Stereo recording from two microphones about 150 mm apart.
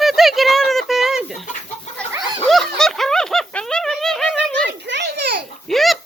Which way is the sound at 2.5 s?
Centre (ahead or behind).